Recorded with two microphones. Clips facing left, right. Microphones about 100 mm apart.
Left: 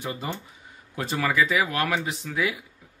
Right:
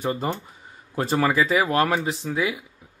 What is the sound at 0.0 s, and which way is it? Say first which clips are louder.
A man's voice: right 6 dB; 45° right (ahead or behind).